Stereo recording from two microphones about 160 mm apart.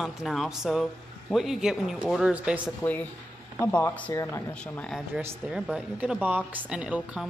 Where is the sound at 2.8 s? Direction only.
10° left (ahead or behind).